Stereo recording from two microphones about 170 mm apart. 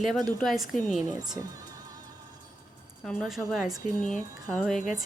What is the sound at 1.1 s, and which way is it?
Speech, 20° right (ahead or behind).